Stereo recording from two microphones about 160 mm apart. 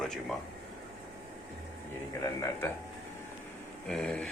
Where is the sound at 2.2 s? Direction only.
20° left (ahead or behind).